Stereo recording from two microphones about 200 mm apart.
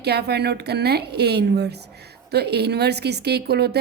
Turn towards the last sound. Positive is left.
turn(degrees=-55)  # may be behind; listen again after turning